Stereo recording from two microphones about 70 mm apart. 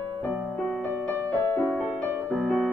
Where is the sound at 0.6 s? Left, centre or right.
Left.